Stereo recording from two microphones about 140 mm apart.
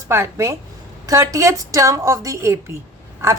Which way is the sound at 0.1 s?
20° right (ahead or behind).